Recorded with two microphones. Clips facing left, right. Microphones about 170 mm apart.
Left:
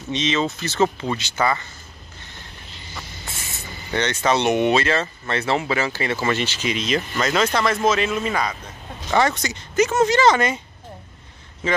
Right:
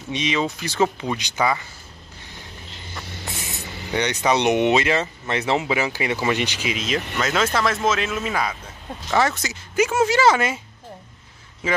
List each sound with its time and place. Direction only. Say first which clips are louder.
0.1 s speech: left 1 dB; 10° right (ahead or behind)
3.3 s speech: right 3 dB; 15° right (ahead or behind)
11.6 s speech: left 1 dB; 10° right (ahead or behind)